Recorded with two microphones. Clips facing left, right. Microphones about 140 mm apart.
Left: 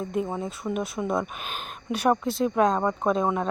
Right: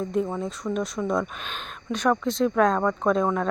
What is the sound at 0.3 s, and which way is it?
Speech, 5° left (ahead or behind).